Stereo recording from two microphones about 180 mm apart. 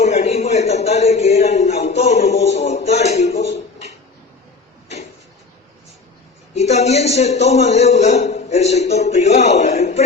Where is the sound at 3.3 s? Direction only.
75° left (ahead or behind).